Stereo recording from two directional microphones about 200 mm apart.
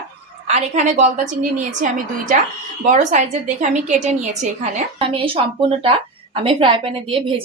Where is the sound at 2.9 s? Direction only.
35° right (ahead or behind).